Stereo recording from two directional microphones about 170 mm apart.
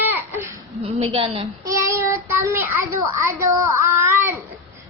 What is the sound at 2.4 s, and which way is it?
A child's voice, 15° right (ahead or behind).